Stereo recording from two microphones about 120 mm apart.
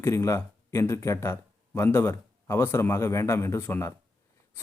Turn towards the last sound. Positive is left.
turn(degrees=20)  # may be behind; listen again after turning